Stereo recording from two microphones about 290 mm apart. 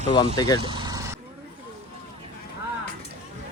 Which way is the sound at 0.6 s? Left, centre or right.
Centre.